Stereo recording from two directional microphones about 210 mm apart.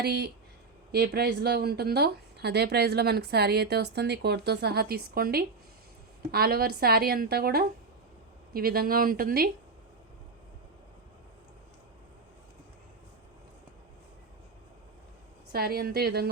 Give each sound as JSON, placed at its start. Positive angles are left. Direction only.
{"t": 0.0, "sound": "speech", "side_deg": -50}
{"t": 15.5, "sound": "speech", "side_deg": -45}